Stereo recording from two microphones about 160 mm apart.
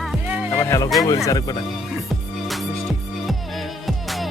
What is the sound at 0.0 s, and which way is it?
Music, 5° right (ahead or behind).